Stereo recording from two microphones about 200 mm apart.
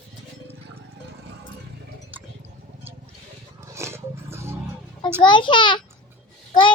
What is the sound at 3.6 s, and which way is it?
Roaring cats, 15° right (ahead or behind).